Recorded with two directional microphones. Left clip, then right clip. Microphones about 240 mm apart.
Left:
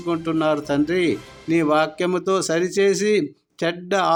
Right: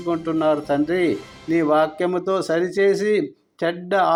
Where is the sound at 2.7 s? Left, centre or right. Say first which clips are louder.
Even; left.